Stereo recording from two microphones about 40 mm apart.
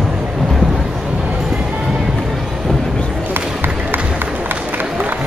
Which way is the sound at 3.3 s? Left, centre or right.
Right.